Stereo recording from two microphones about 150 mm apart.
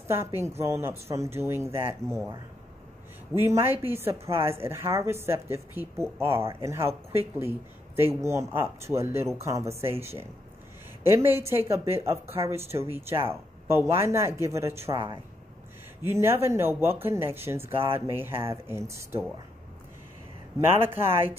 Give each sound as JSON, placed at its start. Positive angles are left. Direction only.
{"t": 0.1, "sound": "speech", "side_deg": -15}
{"t": 3.3, "sound": "speech", "side_deg": -15}
{"t": 11.1, "sound": "speech", "side_deg": -15}
{"t": 16.1, "sound": "speech", "side_deg": -15}
{"t": 17.7, "sound": "speech", "side_deg": -40}
{"t": 18.0, "sound": "speech", "side_deg": -15}
{"t": 20.5, "sound": "speech", "side_deg": -15}